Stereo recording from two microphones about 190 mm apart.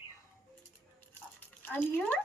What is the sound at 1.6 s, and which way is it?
Speech, 10° left (ahead or behind).